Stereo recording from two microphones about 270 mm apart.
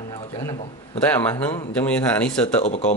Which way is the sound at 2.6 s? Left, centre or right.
Left.